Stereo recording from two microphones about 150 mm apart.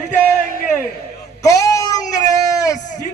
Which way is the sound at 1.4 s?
20° left (ahead or behind).